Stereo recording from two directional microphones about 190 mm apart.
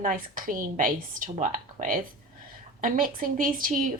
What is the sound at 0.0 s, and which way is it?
Speech, 45° right (ahead or behind).